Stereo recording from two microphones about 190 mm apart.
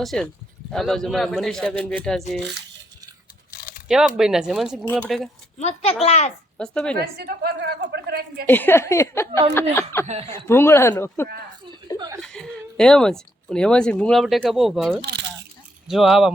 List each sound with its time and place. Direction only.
0.0 s speech: centre (ahead or behind)
3.5 s a sound: 50° left (ahead or behind)
3.8 s speech: 5° right (ahead or behind)
5.5 s a child's voice: 35° left (ahead or behind)
6.6 s speech: 5° left (ahead or behind)
7.0 s a woman's voice: 55° right (ahead or behind)
8.4 s a woman's voice: 10° left (ahead or behind)
10.1 s speech: 35° right (ahead or behind)
10.3 s a woman's voice: 15° left (ahead or behind)
11.9 s speech: 20° right (ahead or behind)
12.2 s speech: centre (ahead or behind)